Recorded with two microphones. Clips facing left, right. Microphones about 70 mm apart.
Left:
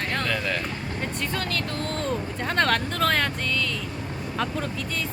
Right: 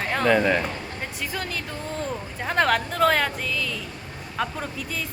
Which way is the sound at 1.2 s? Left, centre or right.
Centre.